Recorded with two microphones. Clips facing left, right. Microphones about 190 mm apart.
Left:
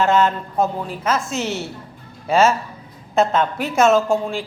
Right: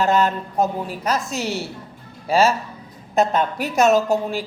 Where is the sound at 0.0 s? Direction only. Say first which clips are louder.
Left 2 dB; 40° right (ahead or behind).